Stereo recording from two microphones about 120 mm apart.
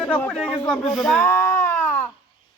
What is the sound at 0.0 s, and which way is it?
Speech, 10° left (ahead or behind).